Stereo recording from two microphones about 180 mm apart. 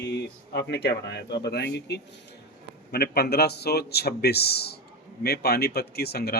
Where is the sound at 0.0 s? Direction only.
70° left (ahead or behind).